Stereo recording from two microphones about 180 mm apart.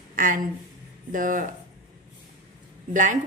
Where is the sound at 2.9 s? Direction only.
45° right (ahead or behind).